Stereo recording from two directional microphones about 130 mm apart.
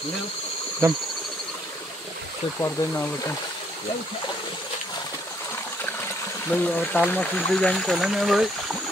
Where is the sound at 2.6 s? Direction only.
15° left (ahead or behind).